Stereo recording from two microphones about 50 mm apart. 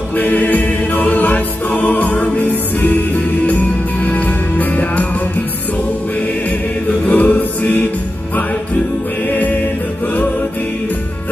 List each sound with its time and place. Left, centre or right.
0.2 s music: left
7.1 s music: left
9.3 s music: left